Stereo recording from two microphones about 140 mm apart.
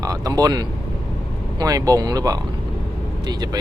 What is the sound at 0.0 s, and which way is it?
Speech, 25° right (ahead or behind).